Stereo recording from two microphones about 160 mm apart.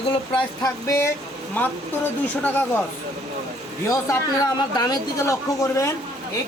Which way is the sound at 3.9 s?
20° left (ahead or behind).